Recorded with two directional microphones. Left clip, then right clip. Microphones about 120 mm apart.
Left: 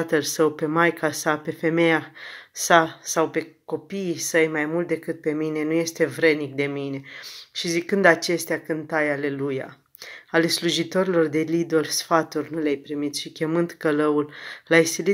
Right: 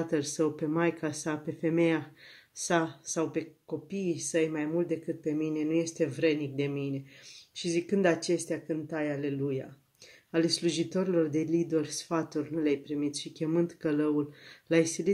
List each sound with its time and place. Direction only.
0.0 s speech: 30° right (ahead or behind)